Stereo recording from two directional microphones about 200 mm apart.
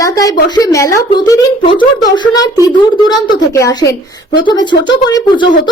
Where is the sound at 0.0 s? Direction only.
15° left (ahead or behind).